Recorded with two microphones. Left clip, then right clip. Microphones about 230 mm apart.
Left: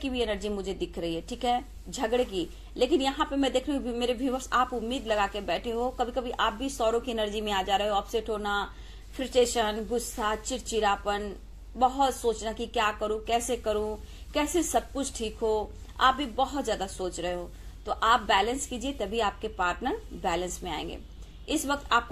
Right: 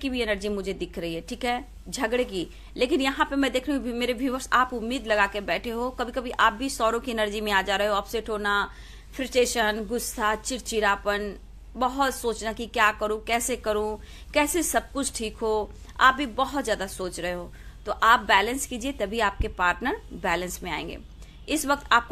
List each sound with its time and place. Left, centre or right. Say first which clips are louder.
0.0 s a woman's voice: right 3 dB; right